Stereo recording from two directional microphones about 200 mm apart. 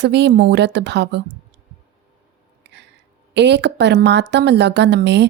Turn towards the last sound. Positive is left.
turn(degrees=-60)  # may be behind; listen again after turning